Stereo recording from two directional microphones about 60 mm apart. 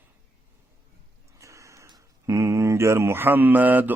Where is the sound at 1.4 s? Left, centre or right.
Right.